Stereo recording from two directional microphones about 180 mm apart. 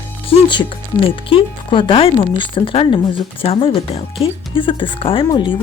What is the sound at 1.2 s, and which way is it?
Speech, 30° left (ahead or behind).